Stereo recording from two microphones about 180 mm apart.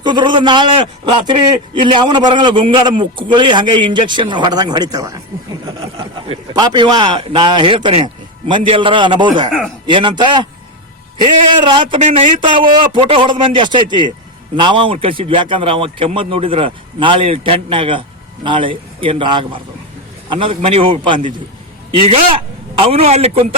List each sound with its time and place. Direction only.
0.0 s a man's voice: 25° right (ahead or behind)
11.6 s a man's voice: 25° right (ahead or behind)
11.9 s a man's voice: 40° right (ahead or behind)
12.4 s a man's voice: 30° right (ahead or behind)
22.8 s a man's voice: 35° right (ahead or behind)